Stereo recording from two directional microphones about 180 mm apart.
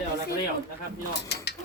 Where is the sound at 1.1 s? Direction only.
65° left (ahead or behind).